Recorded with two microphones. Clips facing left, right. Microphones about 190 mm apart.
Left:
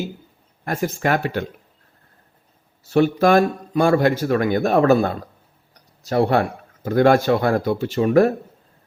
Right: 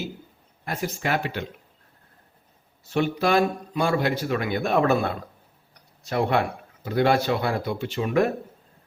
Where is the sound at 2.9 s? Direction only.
45° left (ahead or behind).